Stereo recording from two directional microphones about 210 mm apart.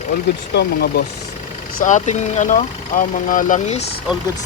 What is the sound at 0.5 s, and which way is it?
Speech, 50° left (ahead or behind).